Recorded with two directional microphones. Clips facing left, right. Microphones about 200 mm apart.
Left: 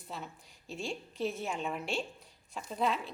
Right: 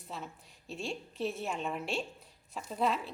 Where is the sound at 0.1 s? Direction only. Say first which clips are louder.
Even; centre (ahead or behind).